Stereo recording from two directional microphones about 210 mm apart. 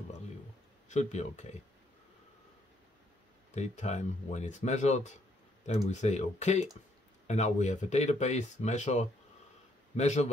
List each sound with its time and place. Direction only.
0.8 s speech: 35° left (ahead or behind)
3.5 s speech: 35° left (ahead or behind)